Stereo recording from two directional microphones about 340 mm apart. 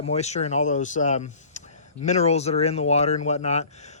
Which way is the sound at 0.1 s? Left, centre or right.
Centre.